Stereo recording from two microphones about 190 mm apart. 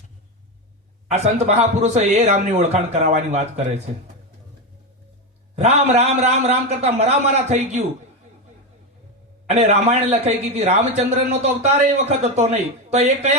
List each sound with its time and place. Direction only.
1.1 s a man's voice: 35° right (ahead or behind)
5.5 s a man's voice: 35° right (ahead or behind)
9.5 s a man's voice: 35° right (ahead or behind)